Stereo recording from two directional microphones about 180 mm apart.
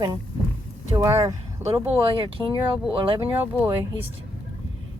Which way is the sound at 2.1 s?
30° right (ahead or behind).